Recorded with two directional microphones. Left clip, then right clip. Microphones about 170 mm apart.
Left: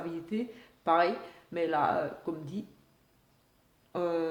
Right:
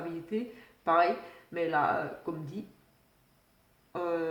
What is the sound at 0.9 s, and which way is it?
Speech, 45° left (ahead or behind).